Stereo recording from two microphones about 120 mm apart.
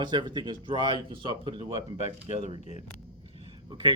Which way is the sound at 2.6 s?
70° left (ahead or behind).